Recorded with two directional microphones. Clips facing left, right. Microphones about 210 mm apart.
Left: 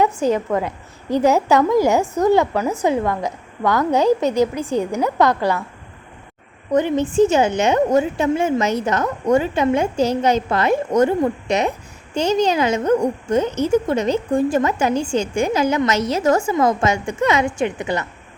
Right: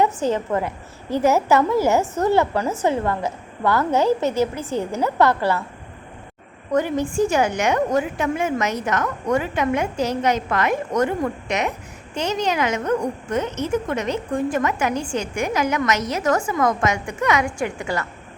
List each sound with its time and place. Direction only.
0.0 s a woman's voice: 15° left (ahead or behind)
6.7 s a woman's voice: 20° left (ahead or behind)